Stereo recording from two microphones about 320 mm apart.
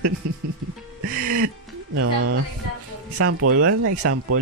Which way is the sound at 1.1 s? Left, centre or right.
Right.